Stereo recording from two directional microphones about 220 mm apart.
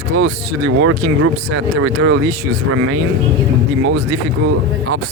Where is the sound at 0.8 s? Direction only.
80° right.